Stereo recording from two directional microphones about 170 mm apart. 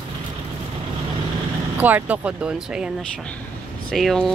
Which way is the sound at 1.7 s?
10° right (ahead or behind).